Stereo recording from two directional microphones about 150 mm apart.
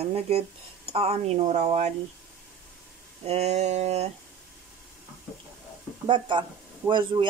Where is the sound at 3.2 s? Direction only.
45° right (ahead or behind).